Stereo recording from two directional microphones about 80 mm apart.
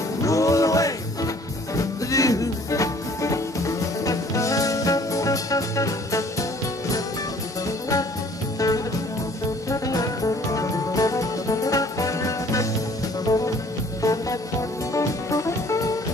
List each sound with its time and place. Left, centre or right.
0.2 s music: left
7.6 s music: left